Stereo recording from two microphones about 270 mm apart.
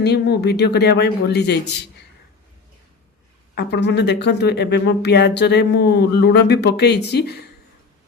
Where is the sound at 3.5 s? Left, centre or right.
Left.